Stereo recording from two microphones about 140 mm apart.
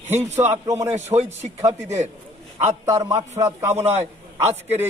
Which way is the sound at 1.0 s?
50° right (ahead or behind).